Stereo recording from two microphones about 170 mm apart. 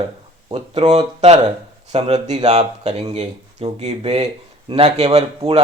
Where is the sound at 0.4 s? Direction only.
35° right (ahead or behind).